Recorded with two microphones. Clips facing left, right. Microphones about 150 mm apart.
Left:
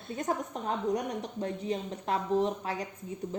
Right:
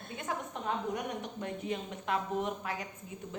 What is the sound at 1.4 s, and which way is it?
A woman's voice, 35° left (ahead or behind).